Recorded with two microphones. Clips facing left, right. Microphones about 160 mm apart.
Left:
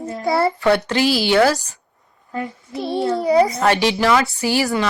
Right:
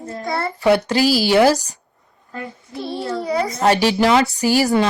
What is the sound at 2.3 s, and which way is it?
A child's voice, 20° left (ahead or behind).